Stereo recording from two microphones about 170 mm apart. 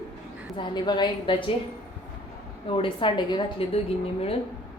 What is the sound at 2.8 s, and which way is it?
A woman's voice, 30° left (ahead or behind).